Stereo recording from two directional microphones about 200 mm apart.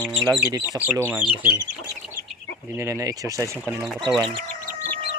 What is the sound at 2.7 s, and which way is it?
Speech, 15° right (ahead or behind).